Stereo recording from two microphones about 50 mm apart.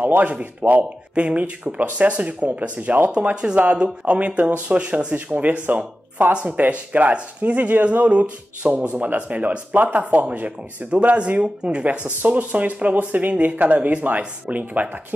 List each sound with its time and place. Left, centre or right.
0.0 s speech: right